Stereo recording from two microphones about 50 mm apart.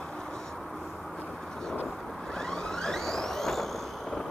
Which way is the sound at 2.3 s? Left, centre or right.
Centre.